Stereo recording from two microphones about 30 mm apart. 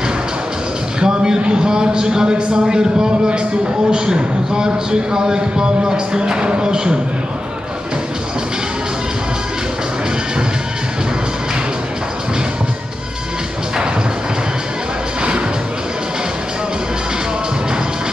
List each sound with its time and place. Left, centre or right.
1.0 s speech: right